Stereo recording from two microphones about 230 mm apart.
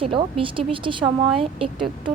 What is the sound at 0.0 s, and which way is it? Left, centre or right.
A woman's voice, right.